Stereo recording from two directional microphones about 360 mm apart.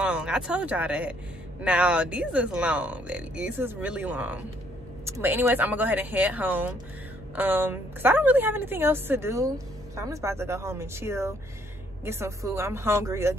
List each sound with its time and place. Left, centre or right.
0.0 s a woman's voice: centre